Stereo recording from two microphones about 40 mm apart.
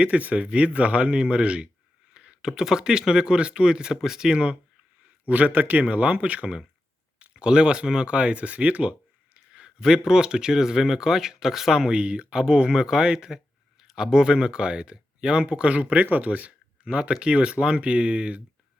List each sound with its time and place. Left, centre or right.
0.0 s speech: right
2.1 s a sound: right
2.5 s speech: centre
5.3 s a man's voice: right
7.3 s speech: right
9.5 s speech: centre
11.9 s speech: right
16.8 s speech: right